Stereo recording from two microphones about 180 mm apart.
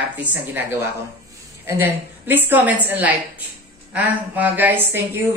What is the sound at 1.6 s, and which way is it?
Speech, 15° right (ahead or behind).